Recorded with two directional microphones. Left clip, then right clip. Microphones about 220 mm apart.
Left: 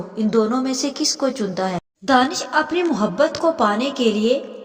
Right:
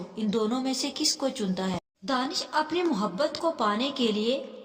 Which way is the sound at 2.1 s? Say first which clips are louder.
Left 11 dB; 30° left (ahead or behind).